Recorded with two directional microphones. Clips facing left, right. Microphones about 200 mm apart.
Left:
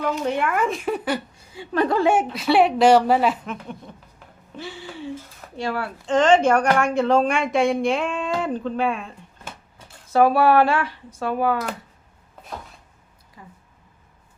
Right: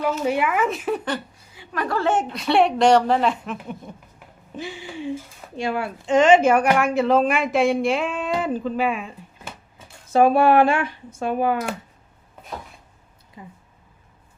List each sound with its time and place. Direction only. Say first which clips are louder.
0.2 s speech: right 1 dB; 5° right (ahead or behind)
1.5 s a woman's voice: left 5 dB; 25° left (ahead or behind)
2.0 s speech: left 3 dB; 10° left (ahead or behind)
3.9 s speech: right 2 dB; 10° right (ahead or behind)
10.1 s speech: right 1 dB; 20° right (ahead or behind)
13.4 s speech: right 4 dB; 20° right (ahead or behind)